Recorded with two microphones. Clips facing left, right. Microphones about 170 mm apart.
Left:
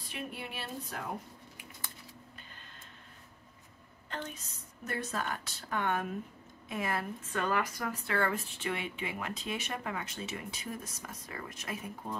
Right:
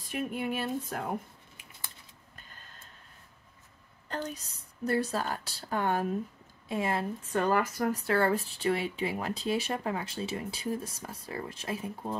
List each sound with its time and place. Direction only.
0.1 s a sound: 45° right (ahead or behind)
4.1 s a woman's voice: 40° right (ahead or behind)
7.4 s speech: 40° right (ahead or behind)